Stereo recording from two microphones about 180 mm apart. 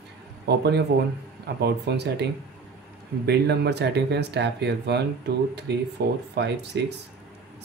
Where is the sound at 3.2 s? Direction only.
65° right (ahead or behind).